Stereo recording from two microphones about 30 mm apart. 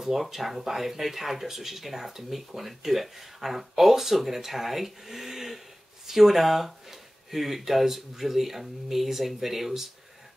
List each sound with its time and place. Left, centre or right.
0.1 s speech: centre